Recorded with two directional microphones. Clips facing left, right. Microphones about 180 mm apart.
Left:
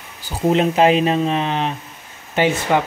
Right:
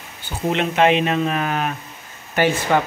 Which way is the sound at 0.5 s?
35° left (ahead or behind).